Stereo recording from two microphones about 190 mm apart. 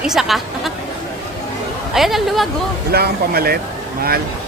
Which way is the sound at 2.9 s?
55° right (ahead or behind).